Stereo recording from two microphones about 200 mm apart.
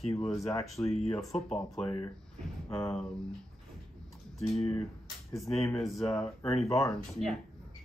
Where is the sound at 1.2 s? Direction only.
Centre (ahead or behind).